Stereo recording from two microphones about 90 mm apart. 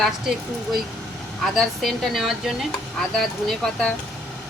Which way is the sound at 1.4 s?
Centre (ahead or behind).